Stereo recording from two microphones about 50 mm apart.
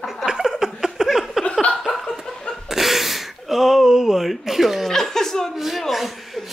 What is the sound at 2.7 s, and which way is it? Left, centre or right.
Gasp, centre.